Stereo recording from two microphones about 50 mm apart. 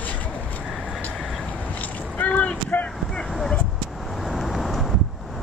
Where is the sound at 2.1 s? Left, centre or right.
Left.